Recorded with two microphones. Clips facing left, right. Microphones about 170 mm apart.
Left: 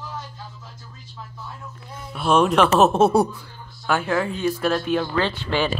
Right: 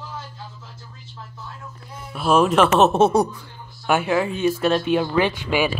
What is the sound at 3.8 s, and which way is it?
Speech, 15° right (ahead or behind).